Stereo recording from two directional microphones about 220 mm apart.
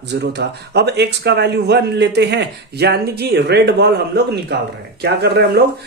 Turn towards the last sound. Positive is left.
turn(degrees=-50)  # may be behind; listen again after turning